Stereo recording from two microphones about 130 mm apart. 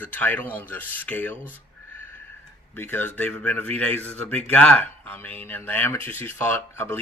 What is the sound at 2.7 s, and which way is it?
Speech, 15° left (ahead or behind).